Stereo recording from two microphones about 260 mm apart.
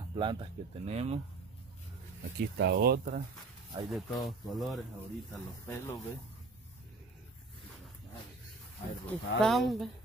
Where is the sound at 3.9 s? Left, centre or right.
Centre.